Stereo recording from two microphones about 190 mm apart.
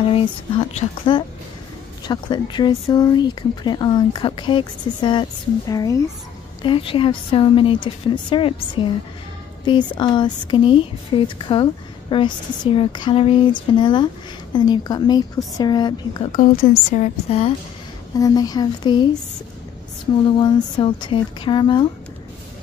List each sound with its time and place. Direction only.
0.1 s speech: 30° left (ahead or behind)
16.3 s a woman's voice: 45° left (ahead or behind)
18.1 s speech: 20° left (ahead or behind)
20.2 s speech: 25° left (ahead or behind)